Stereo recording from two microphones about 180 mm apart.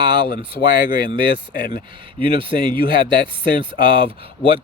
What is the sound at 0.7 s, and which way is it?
Speech, 55° left (ahead or behind).